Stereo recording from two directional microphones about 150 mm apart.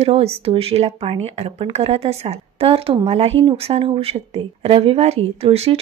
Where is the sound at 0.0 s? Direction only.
40° right (ahead or behind).